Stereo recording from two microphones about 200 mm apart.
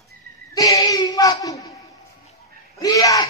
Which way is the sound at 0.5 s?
20° left (ahead or behind).